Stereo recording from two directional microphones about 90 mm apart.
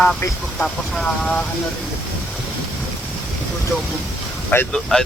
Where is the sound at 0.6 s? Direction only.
10° left (ahead or behind).